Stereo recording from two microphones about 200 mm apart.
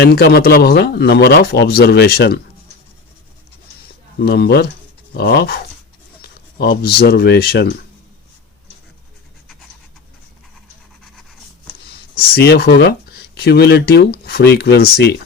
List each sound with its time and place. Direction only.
0.0 s speech: 50° left (ahead or behind)
4.2 s speech: 55° left (ahead or behind)
12.1 s speech: 50° left (ahead or behind)